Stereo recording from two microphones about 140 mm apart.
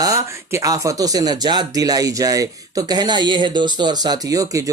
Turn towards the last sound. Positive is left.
turn(degrees=-25)  # may be behind; listen again after turning